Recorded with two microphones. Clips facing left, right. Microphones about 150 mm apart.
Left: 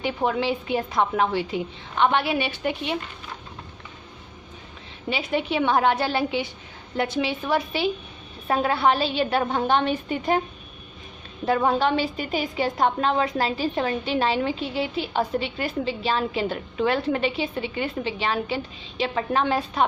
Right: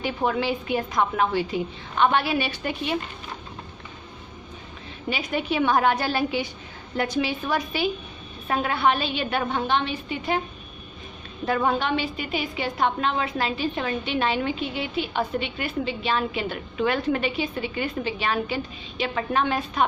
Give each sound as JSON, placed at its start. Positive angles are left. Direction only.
{"t": 0.0, "sound": "a woman's voice", "side_deg": 20}
{"t": 5.1, "sound": "a woman's voice", "side_deg": 25}
{"t": 11.4, "sound": "a woman's voice", "side_deg": 30}